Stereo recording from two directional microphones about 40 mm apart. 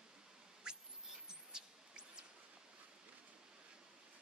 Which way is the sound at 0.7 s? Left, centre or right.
Right.